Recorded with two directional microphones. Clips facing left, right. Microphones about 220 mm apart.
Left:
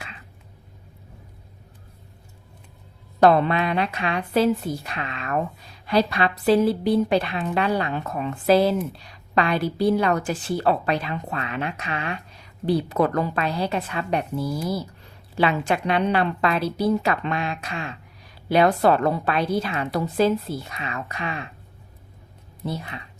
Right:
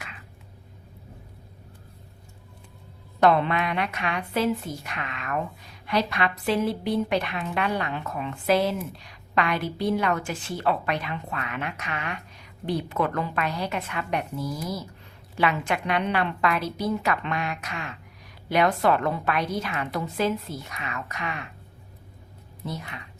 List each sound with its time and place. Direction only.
3.2 s a woman's voice: 35° left (ahead or behind)
22.6 s a woman's voice: 30° left (ahead or behind)